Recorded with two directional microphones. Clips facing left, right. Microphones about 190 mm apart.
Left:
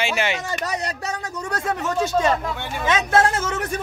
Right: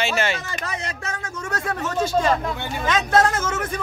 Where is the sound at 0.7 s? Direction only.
40° left (ahead or behind).